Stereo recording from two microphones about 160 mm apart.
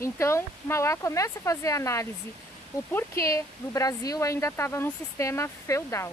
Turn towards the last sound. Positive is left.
turn(degrees=15)  # may be behind; listen again after turning